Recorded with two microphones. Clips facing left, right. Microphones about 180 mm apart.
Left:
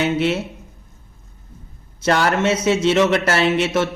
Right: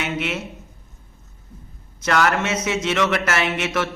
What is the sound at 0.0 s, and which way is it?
Speech, 30° left (ahead or behind).